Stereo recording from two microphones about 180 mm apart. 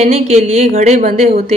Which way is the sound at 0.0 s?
35° right (ahead or behind).